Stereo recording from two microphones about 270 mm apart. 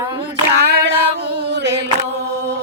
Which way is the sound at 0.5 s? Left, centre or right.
Right.